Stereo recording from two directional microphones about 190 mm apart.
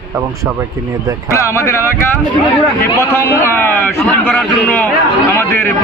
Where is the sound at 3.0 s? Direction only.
15° left (ahead or behind).